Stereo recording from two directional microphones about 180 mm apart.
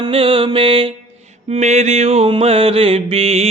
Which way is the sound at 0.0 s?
30° right (ahead or behind).